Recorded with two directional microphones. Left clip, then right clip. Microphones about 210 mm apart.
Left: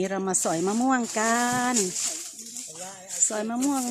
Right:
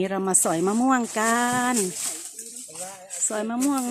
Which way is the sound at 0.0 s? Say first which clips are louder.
Right 2 dB; 5° right (ahead or behind).